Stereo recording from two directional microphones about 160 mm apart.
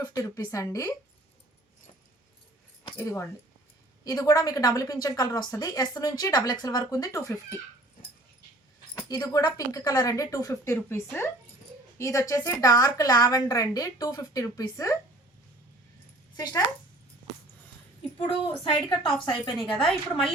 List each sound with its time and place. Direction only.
0.0 s a woman's voice: 20° left (ahead or behind)
2.9 s a woman's voice: 15° left (ahead or behind)
9.0 s a woman's voice: 20° left (ahead or behind)
16.4 s a woman's voice: 25° left (ahead or behind)
18.6 s a woman's voice: 30° left (ahead or behind)